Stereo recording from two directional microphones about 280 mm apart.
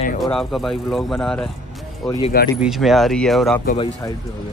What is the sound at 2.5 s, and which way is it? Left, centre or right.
Speech, centre.